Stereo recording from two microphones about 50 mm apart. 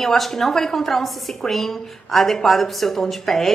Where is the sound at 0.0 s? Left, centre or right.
Centre.